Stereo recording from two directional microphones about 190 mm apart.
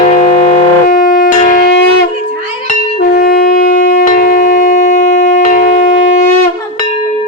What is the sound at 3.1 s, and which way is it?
Wind instrument, 50° left (ahead or behind).